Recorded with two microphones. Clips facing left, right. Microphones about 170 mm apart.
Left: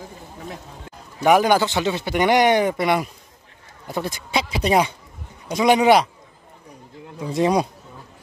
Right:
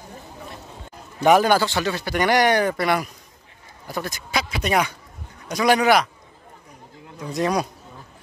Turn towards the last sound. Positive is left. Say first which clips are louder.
# left 3 dB
turn(degrees=25)  # may be behind; listen again after turning